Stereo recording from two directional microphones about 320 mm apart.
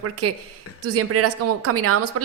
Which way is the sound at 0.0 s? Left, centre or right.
Right.